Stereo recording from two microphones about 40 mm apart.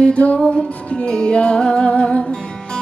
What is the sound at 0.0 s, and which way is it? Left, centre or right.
Music, left.